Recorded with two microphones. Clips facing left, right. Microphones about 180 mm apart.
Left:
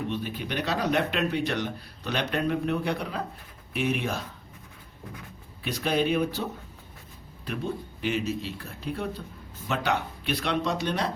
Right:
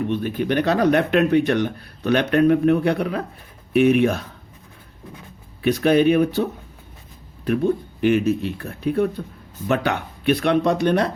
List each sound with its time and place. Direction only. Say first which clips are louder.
0.1 s speech: right 10 dB; 55° right (ahead or behind)
5.6 s speech: right 10 dB; 60° right (ahead or behind)